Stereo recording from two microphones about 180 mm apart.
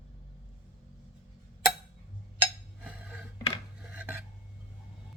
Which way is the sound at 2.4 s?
10° right (ahead or behind).